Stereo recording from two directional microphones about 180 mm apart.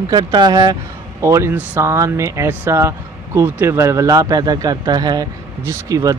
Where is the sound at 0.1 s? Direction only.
25° right (ahead or behind).